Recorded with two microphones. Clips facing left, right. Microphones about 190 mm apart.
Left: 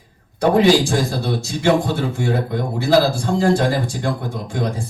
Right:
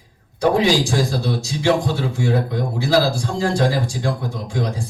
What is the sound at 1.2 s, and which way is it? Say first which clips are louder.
A man's voice: left 1 dB; 55° left (ahead or behind).